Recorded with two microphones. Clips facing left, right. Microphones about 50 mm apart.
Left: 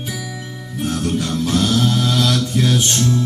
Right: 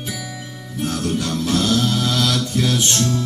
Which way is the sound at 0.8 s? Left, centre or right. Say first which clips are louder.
Left 1 dB; centre.